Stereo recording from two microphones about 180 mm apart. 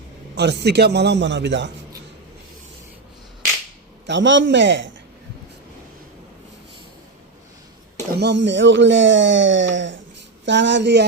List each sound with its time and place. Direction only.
0.3 s a man's voice: 70° right (ahead or behind)
4.0 s a man's voice: 85° right
8.2 s a man's voice: 75° right (ahead or behind)